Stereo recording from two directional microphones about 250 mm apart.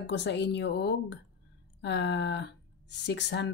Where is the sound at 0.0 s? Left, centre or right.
Left.